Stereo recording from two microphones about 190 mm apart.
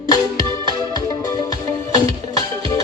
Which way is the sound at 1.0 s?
20° left (ahead or behind).